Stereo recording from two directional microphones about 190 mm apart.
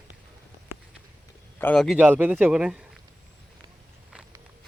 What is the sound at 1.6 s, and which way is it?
Speech, 5° left (ahead or behind).